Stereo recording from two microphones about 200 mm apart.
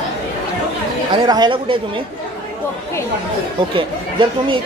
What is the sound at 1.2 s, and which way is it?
Speech, 20° right (ahead or behind).